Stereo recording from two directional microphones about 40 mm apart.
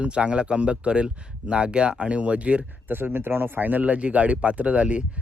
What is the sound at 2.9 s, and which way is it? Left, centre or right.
Speech, right.